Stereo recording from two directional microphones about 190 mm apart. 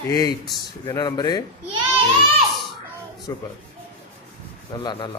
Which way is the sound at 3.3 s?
15° left (ahead or behind).